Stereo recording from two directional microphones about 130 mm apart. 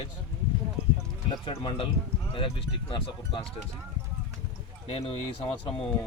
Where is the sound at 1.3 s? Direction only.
40° left (ahead or behind).